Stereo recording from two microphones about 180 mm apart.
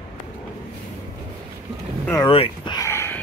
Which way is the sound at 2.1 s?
30° left (ahead or behind).